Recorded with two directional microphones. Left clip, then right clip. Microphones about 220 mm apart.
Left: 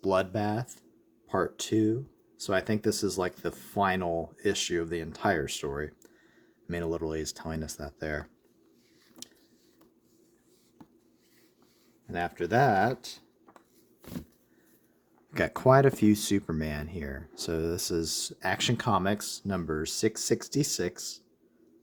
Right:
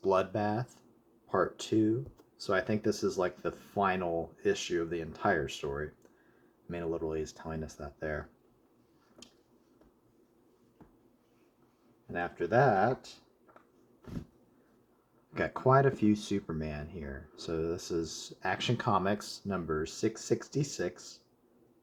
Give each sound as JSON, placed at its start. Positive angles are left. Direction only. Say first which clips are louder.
{"t": 0.0, "sound": "speech", "louder": "left 2 dB", "side_deg": 50}
{"t": 12.1, "sound": "speech", "louder": "left 2 dB", "side_deg": 45}
{"t": 15.3, "sound": "speech", "louder": "left 5 dB", "side_deg": 55}